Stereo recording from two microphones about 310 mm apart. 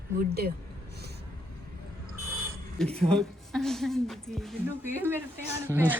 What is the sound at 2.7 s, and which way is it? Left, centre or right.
Speech, centre.